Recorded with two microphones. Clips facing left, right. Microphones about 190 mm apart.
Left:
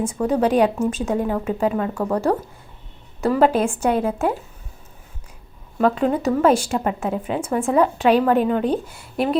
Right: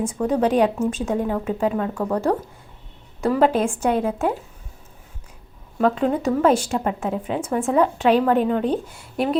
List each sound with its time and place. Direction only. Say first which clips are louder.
0.0 s a woman's voice: left 1 dB; 5° left (ahead or behind)
5.8 s a woman's voice: left 1 dB; 5° left (ahead or behind)